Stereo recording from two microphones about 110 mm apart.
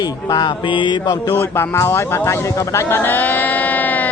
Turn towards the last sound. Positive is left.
turn(degrees=15)  # may be behind; listen again after turning